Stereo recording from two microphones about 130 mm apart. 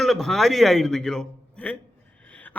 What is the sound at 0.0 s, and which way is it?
A man's voice, centre (ahead or behind).